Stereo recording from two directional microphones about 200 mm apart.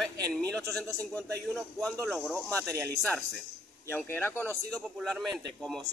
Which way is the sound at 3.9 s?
10° left (ahead or behind).